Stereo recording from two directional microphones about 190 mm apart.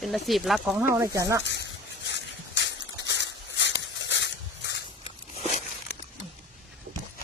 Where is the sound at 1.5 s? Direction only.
65° left (ahead or behind).